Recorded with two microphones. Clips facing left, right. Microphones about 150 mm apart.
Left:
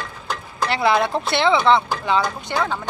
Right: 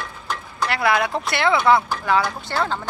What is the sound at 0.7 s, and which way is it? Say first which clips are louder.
Speech: left 2 dB; 25° left (ahead or behind).